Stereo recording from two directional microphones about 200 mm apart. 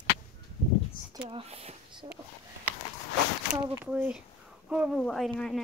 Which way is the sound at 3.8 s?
5° right (ahead or behind).